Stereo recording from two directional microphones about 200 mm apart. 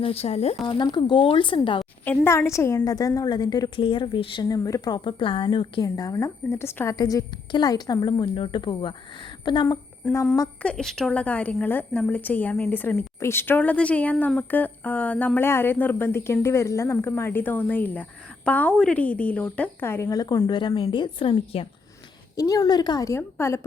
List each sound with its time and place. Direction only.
0.0 s a woman's voice: 30° left (ahead or behind)
1.8 s a woman's voice: 10° left (ahead or behind)
10.1 s a woman's voice: 10° left (ahead or behind)
10.6 s a woman's voice: 5° left (ahead or behind)